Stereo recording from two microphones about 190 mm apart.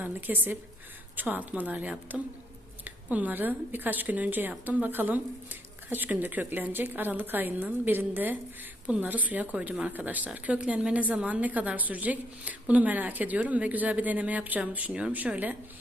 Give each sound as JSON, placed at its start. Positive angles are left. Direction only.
{"t": 0.0, "sound": "speech", "side_deg": -10}